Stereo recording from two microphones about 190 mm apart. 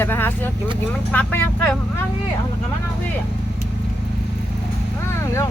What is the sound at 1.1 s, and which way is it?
Speech, 10° left (ahead or behind).